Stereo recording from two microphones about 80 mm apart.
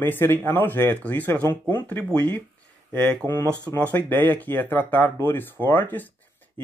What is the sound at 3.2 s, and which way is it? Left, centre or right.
Speech, left.